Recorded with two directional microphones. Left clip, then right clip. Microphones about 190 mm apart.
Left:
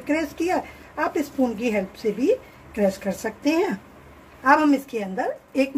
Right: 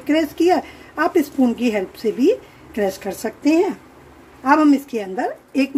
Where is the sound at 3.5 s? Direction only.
5° right (ahead or behind).